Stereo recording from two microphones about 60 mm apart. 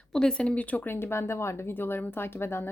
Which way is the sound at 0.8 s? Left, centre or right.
Left.